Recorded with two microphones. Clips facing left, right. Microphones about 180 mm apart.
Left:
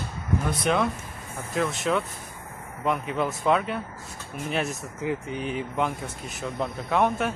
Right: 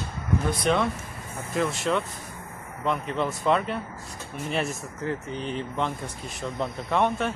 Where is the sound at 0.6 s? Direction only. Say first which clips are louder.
Even; centre (ahead or behind).